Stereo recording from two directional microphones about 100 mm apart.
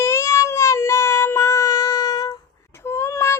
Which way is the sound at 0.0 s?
25° left (ahead or behind).